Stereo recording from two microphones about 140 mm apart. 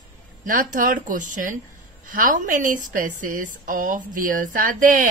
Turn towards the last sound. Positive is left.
turn(degrees=-70)  # may be behind; listen again after turning